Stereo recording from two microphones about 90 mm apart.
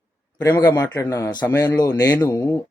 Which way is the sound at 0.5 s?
40° left (ahead or behind).